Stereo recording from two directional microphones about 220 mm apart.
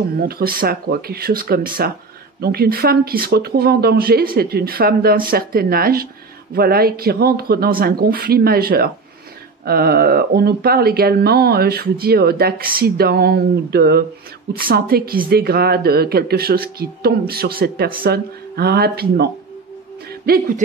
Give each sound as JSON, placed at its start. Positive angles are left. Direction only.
{"t": 0.2, "sound": "speech", "side_deg": -45}
{"t": 20.2, "sound": "speech", "side_deg": -40}